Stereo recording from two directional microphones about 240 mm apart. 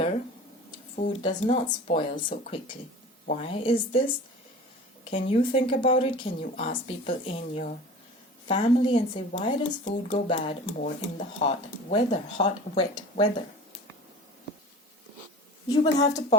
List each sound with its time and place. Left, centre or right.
1.2 s speech: centre
5.1 s speech: left
15.7 s speech: centre